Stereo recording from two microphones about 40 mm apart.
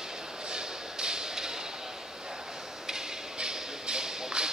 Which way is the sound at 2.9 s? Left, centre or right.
Centre.